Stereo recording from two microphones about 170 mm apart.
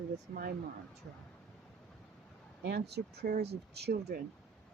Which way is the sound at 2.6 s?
75° right (ahead or behind).